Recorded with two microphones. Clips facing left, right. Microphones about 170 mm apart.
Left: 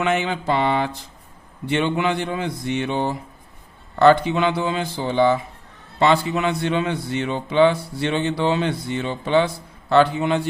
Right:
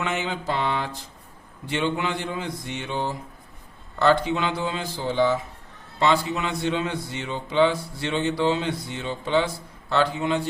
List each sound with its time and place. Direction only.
0.0 s mantra: 65° left (ahead or behind)
1.6 s a man's voice: 60° left (ahead or behind)